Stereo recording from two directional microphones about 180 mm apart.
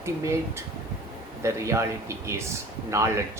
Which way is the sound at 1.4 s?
15° right (ahead or behind).